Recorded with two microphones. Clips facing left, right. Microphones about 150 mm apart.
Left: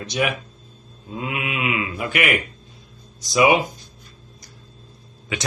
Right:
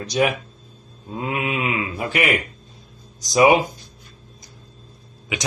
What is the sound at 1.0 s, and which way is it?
Speech, 35° right (ahead or behind).